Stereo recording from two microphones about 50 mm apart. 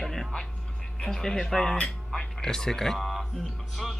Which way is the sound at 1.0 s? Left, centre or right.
Centre.